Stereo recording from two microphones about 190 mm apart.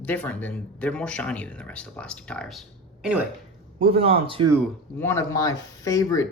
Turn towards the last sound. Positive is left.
turn(degrees=15)  # may be behind; listen again after turning